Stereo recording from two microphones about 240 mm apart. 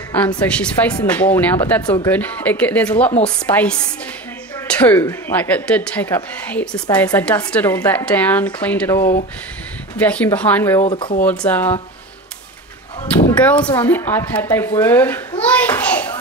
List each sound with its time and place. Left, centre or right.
0.4 s speech: centre
10.8 s speech: left
11.2 s speech: centre
13.4 s speech: centre
15.4 s bouncing: centre